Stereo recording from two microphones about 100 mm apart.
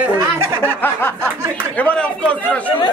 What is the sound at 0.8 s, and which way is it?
A man's voice, 20° left (ahead or behind).